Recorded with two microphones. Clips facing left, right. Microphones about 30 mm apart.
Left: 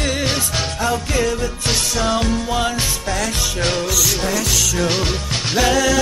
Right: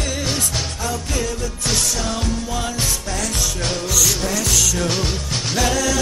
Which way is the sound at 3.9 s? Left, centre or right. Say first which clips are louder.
Left 1 dB; centre.